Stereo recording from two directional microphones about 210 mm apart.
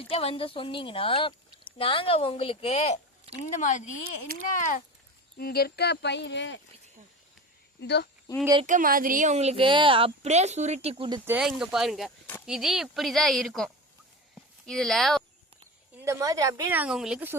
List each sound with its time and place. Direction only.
0.0 s speech: 25° left (ahead or behind)
4.3 s speech: 45° right (ahead or behind)
5.4 s speech: 45° left (ahead or behind)
7.8 s speech: 55° left (ahead or behind)
8.6 s speech: 40° right (ahead or behind); by 11.2 s 25° right (ahead or behind)
11.3 s speech: 5° right (ahead or behind)
14.7 s speech: centre (ahead or behind)
16.0 s a woman's voice: 15° right (ahead or behind)